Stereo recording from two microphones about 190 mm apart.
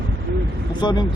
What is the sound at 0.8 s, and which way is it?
Speech, 25° left (ahead or behind).